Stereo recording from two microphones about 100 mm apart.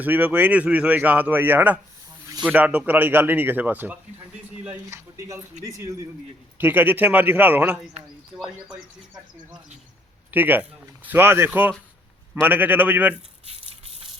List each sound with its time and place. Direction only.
0.0 s speech: 15° right (ahead or behind)
4.9 s speech: 30° right (ahead or behind)
6.6 s speech: 20° right (ahead or behind)
10.3 s speech: 20° right (ahead or behind)